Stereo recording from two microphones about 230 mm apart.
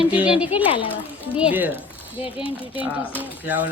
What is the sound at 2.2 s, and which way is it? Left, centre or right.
Speech, left.